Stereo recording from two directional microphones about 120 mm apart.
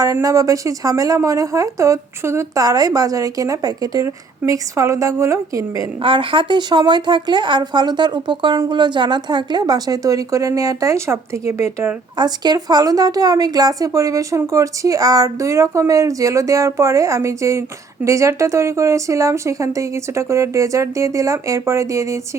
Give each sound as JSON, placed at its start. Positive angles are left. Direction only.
{"t": 0.0, "sound": "speech", "side_deg": -30}
{"t": 6.0, "sound": "speech", "side_deg": -45}
{"t": 12.1, "sound": "speech", "side_deg": -35}